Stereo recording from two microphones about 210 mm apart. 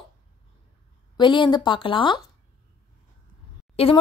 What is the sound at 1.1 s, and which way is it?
Speech, 20° left (ahead or behind).